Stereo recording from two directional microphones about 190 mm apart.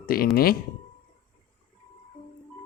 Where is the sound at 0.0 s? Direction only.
50° left (ahead or behind).